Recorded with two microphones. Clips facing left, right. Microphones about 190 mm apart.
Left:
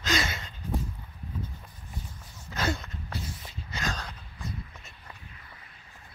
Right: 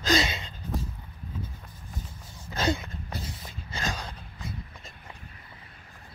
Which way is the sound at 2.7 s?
10° right (ahead or behind).